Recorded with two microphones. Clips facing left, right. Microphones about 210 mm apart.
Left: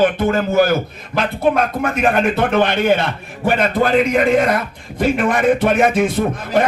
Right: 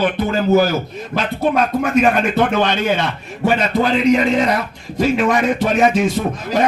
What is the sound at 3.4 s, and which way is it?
A man's voice, 55° left (ahead or behind).